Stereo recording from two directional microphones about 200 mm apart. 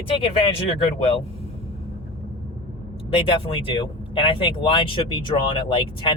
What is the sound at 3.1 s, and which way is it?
Speech, 25° left (ahead or behind).